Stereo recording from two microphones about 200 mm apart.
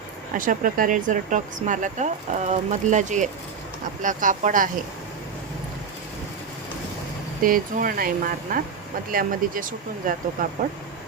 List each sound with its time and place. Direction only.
0.3 s speech: 40° right (ahead or behind)
7.4 s speech: 45° right (ahead or behind)